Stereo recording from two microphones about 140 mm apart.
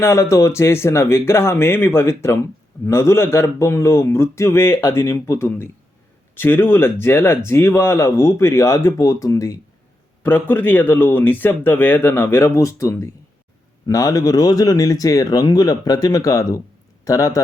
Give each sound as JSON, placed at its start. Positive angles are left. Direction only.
{"t": 0.0, "sound": "speech", "side_deg": 20}